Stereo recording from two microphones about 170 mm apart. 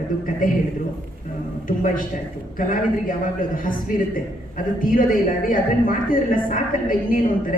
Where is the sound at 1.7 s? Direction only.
55° left (ahead or behind).